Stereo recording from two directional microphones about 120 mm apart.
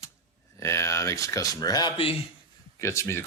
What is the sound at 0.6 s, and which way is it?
Speech, 25° left (ahead or behind).